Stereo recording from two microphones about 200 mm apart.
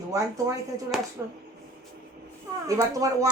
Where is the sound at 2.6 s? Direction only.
15° right (ahead or behind).